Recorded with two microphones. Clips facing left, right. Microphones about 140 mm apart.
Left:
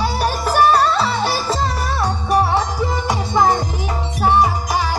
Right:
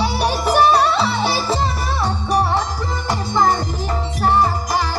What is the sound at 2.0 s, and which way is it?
Music, 5° left (ahead or behind).